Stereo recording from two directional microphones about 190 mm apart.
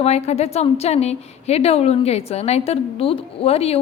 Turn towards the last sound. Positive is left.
turn(degrees=30)  # may be behind; listen again after turning